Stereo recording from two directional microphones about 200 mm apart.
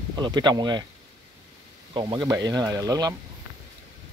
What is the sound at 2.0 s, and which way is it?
Speech, 20° right (ahead or behind).